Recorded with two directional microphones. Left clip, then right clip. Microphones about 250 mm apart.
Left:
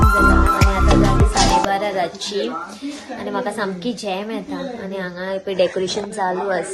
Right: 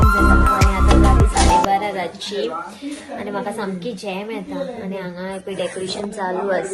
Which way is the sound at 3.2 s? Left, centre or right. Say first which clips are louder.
Left 3 dB; centre.